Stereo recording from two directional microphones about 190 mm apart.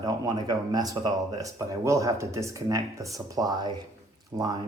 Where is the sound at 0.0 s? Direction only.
20° right (ahead or behind).